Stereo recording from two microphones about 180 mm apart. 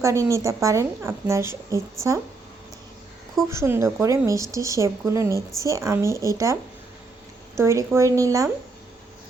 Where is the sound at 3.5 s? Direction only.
15° right (ahead or behind).